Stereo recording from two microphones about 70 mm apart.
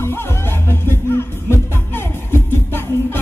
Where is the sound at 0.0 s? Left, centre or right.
Left.